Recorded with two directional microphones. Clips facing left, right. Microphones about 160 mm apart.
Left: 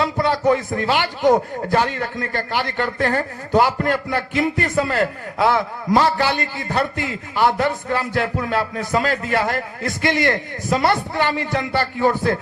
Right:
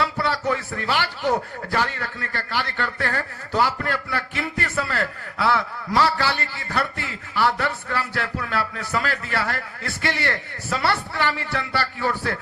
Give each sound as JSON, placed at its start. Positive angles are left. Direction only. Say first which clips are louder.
{"t": 0.0, "sound": "a man's voice", "louder": "left 6 dB", "side_deg": 15}